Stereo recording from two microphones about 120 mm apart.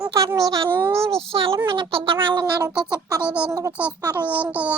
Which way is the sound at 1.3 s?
50° right (ahead or behind).